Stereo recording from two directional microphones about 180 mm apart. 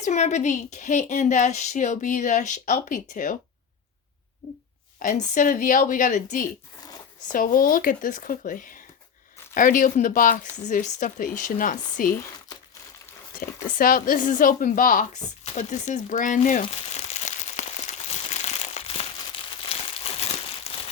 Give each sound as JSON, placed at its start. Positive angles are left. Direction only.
{"t": 0.0, "sound": "a woman's voice", "side_deg": 40}
{"t": 4.9, "sound": "a woman's voice", "side_deg": 45}
{"t": 7.3, "sound": "a woman's voice", "side_deg": 50}
{"t": 13.7, "sound": "a woman's voice", "side_deg": 50}
{"t": 18.1, "sound": "crumpling", "side_deg": 40}